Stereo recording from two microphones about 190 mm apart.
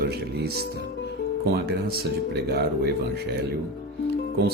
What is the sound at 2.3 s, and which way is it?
Speech, 55° right (ahead or behind).